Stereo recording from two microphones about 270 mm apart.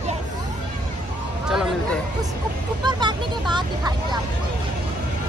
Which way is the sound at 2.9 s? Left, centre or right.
Centre.